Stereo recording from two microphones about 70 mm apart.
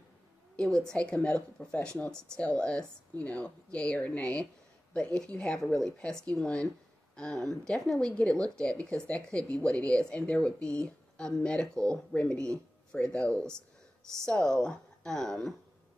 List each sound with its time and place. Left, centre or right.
0.8 s speech: centre